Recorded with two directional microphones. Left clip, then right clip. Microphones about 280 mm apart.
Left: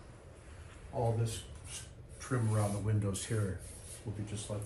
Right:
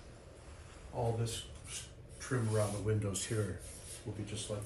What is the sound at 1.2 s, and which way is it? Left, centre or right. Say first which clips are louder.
Speech: right 1 dB; centre.